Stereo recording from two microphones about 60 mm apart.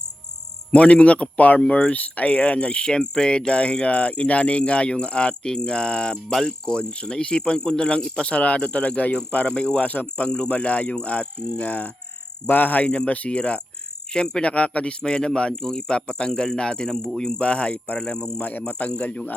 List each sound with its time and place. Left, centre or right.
0.7 s speech: centre
9.5 s speech: centre
10.2 s speech: centre
17.4 s speech: centre